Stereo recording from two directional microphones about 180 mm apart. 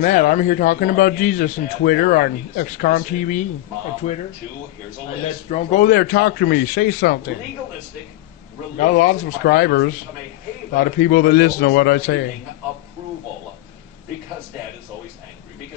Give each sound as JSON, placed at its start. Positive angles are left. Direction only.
{"t": 0.0, "sound": "a man's voice", "side_deg": 45}
{"t": 5.5, "sound": "a man's voice", "side_deg": 40}
{"t": 5.9, "sound": "a man's voice", "side_deg": 60}
{"t": 8.7, "sound": "a man's voice", "side_deg": 50}
{"t": 10.8, "sound": "a man's voice", "side_deg": 50}